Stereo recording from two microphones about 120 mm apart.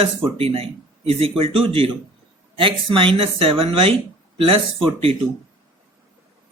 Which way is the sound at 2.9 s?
45° right (ahead or behind).